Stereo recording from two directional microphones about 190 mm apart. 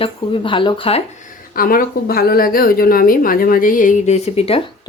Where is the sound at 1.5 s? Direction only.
50° left (ahead or behind).